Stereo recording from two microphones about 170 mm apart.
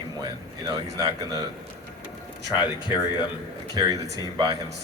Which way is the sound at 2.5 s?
25° left (ahead or behind).